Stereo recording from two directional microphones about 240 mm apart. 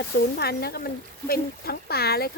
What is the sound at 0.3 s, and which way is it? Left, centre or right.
Speech, left.